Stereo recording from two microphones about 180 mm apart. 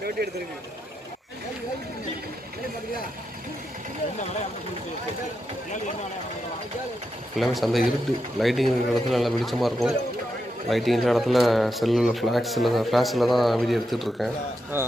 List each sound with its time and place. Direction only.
0.2 s speech: 60° right (ahead or behind)
7.3 s speech: centre (ahead or behind)
14.7 s speech: 10° right (ahead or behind)